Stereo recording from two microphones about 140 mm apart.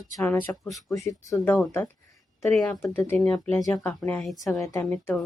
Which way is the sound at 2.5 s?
Centre (ahead or behind).